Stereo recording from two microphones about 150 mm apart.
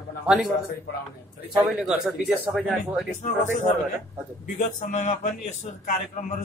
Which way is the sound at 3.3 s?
55° left (ahead or behind).